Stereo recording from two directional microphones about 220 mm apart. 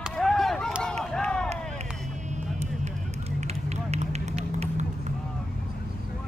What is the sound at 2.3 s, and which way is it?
Run, 30° right (ahead or behind).